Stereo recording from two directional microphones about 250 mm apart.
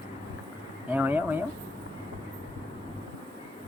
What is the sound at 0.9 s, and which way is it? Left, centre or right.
Speech, centre.